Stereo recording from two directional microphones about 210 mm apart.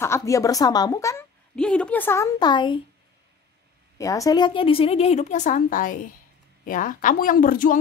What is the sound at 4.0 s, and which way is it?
A woman's voice, 15° left (ahead or behind).